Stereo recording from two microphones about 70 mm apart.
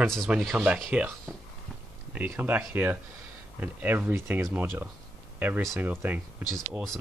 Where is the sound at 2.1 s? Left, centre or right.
Right.